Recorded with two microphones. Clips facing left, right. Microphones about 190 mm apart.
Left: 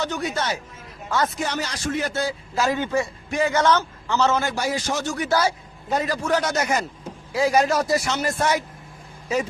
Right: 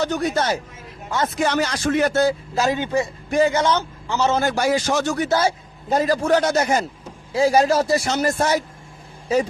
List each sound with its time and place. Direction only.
0.0 s a man's voice: 40° right (ahead or behind)
1.4 s speech: 70° right (ahead or behind); by 2.3 s 50° right (ahead or behind)
2.6 s speech: 20° right (ahead or behind)
3.2 s speech: 40° right (ahead or behind)
3.5 s a man's voice: 15° right (ahead or behind)
4.4 s a man's voice: 45° right (ahead or behind)
4.6 s speech: 75° right (ahead or behind)
5.1 s a man's voice: 30° right (ahead or behind)